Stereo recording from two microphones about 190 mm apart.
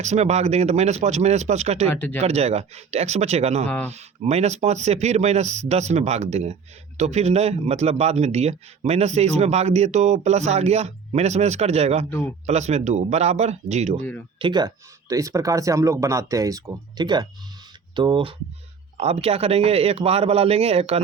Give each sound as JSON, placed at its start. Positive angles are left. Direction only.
{"t": 0.0, "sound": "speech", "side_deg": -35}
{"t": 1.9, "sound": "speech", "side_deg": 10}
{"t": 2.2, "sound": "speech", "side_deg": -35}
{"t": 3.7, "sound": "speech", "side_deg": 10}
{"t": 3.9, "sound": "speech", "side_deg": -35}
{"t": 14.3, "sound": "speech", "side_deg": -25}